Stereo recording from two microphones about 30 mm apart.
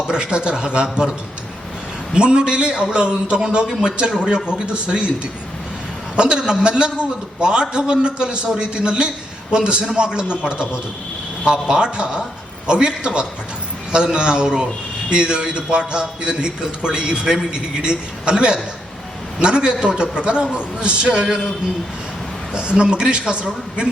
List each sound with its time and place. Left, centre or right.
0.1 s a man's voice: right
2.1 s a man's voice: right
6.1 s a man's voice: right
22.5 s a man's voice: right